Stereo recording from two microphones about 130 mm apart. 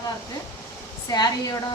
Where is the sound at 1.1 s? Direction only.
30° left (ahead or behind).